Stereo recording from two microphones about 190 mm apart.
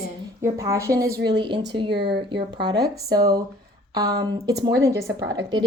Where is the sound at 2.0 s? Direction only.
60° right (ahead or behind).